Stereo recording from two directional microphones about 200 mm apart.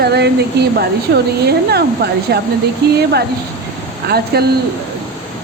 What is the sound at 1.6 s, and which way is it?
Speech, 55° right (ahead or behind).